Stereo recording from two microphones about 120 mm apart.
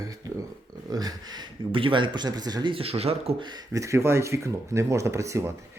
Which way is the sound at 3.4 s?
40° right (ahead or behind).